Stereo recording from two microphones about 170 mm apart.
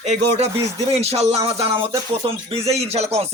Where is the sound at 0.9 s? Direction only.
40° right (ahead or behind).